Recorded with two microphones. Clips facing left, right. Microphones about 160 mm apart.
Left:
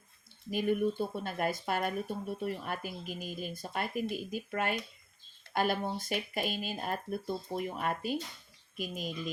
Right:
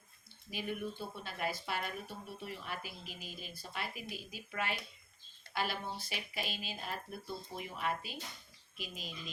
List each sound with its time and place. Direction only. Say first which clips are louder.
0.5 s speech: left 10 dB; 50° left (ahead or behind)